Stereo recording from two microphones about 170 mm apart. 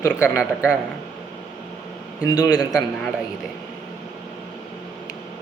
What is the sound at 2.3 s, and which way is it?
Speech, 20° left (ahead or behind).